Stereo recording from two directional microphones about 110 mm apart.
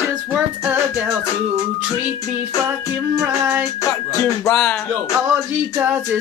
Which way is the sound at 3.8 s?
30° left (ahead or behind).